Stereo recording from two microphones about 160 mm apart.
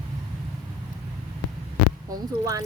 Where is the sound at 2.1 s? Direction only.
20° right (ahead or behind).